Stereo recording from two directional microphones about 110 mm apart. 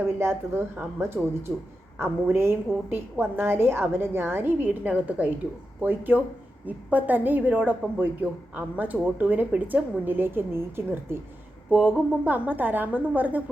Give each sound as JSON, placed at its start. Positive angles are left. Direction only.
{"t": 0.2, "sound": "a woman's voice", "side_deg": -20}